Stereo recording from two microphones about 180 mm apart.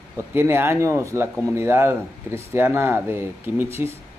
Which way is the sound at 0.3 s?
10° right (ahead or behind).